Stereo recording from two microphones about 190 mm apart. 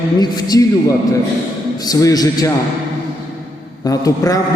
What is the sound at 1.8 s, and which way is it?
Speech, 20° left (ahead or behind).